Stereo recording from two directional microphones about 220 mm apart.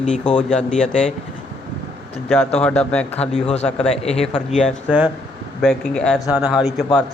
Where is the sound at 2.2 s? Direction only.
10° left (ahead or behind).